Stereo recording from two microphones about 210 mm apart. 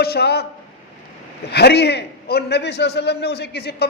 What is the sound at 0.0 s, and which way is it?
Speech, 50° left (ahead or behind).